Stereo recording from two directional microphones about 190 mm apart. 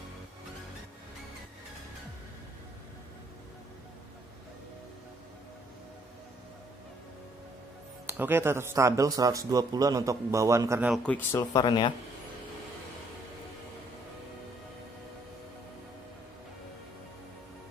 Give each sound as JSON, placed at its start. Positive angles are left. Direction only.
{"t": 8.1, "sound": "speech", "side_deg": -10}
{"t": 10.9, "sound": "speech", "side_deg": 10}
{"t": 11.5, "sound": "speech", "side_deg": 25}